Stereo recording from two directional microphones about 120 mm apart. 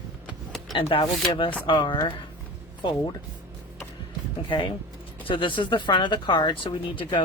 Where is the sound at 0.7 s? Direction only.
45° left (ahead or behind).